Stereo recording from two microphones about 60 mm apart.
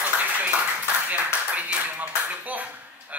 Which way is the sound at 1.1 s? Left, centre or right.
Right.